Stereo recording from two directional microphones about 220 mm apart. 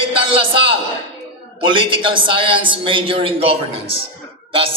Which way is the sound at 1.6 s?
20° right (ahead or behind).